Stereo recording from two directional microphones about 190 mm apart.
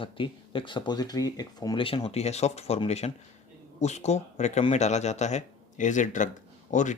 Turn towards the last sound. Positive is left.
turn(degrees=40)  # may be behind; listen again after turning